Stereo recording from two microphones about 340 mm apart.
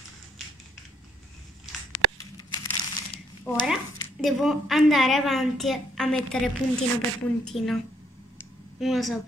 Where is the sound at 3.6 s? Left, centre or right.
Centre.